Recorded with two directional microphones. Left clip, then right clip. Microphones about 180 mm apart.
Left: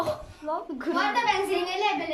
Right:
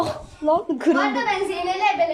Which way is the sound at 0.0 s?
35° right (ahead or behind).